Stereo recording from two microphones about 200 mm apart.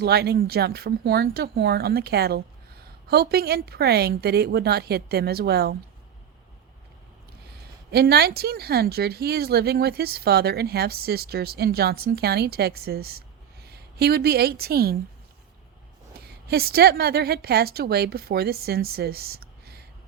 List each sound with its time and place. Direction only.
0.0 s speech: 55° right (ahead or behind)
7.9 s a woman's voice: 55° right (ahead or behind)
16.1 s a woman's voice: 50° right (ahead or behind)